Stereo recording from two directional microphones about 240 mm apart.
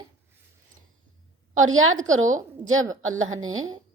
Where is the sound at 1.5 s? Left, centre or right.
Right.